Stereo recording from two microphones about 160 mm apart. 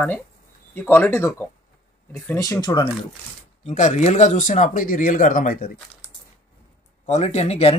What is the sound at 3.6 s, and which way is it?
Speech, 45° left (ahead or behind).